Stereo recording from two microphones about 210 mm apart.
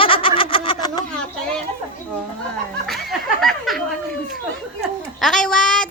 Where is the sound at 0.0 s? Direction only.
25° left (ahead or behind).